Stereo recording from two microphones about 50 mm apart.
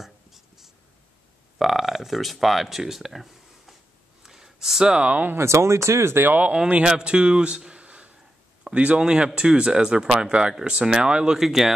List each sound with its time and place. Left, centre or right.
0.0 s writing: centre
1.6 s speech: centre
4.2 s a sound: centre
5.3 s speech: right
6.2 s speech: right
6.8 s a man's voice: centre